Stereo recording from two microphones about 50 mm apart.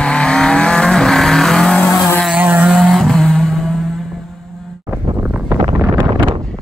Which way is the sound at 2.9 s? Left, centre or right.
Centre.